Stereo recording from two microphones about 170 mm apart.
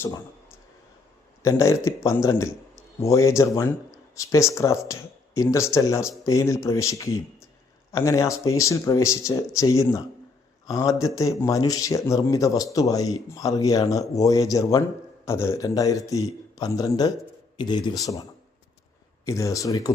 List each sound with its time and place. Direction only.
1.4 s a man's voice: 15° left (ahead or behind)